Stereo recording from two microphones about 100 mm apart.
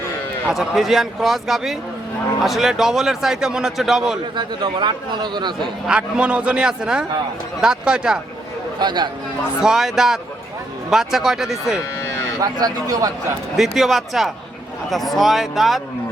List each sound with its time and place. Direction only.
0.5 s a man's voice: centre (ahead or behind)
4.4 s a man's voice: 50° right (ahead or behind)
5.9 s a man's voice: 10° right (ahead or behind)
8.8 s a man's voice: 45° right (ahead or behind)
9.6 s a man's voice: 5° right (ahead or behind)
11.9 s cattle: 30° left (ahead or behind)
12.4 s speech: 40° right (ahead or behind)
13.6 s a man's voice: centre (ahead or behind)